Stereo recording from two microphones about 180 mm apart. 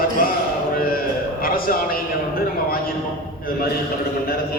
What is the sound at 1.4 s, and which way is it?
Speech, 55° left (ahead or behind).